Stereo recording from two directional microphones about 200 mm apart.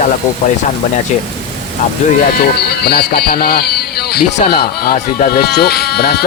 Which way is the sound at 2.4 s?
55° left (ahead or behind).